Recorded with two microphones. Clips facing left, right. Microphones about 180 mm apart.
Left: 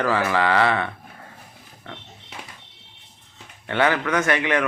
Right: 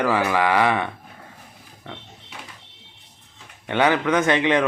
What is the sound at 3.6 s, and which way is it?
A man's voice, 15° right (ahead or behind).